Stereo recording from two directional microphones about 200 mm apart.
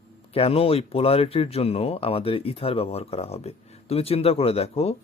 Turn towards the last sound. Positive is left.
turn(degrees=30)  # may be behind; listen again after turning